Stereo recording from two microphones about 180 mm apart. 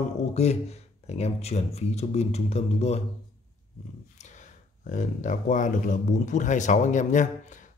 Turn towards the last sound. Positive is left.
turn(degrees=45)  # may be behind; listen again after turning